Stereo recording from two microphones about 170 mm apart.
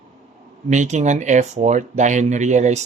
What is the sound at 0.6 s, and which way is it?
Speech, 45° right (ahead or behind).